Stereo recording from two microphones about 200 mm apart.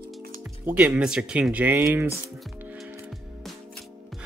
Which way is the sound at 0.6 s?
5° right (ahead or behind).